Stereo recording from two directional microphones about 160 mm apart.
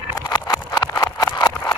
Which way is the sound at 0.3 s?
25° left (ahead or behind).